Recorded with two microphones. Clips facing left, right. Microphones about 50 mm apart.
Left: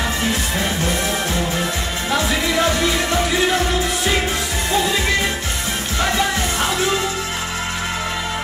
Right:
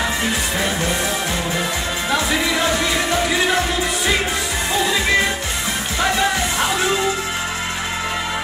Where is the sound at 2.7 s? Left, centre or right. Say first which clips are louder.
Even; right.